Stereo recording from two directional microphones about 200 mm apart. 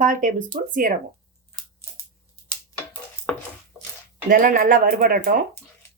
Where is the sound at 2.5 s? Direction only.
10° left (ahead or behind).